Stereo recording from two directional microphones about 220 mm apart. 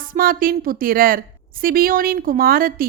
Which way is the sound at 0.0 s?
40° right (ahead or behind).